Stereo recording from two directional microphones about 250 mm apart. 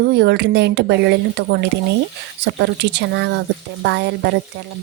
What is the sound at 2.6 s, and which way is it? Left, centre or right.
Speech, right.